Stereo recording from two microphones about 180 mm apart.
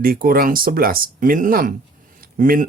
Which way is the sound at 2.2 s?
50° right (ahead or behind).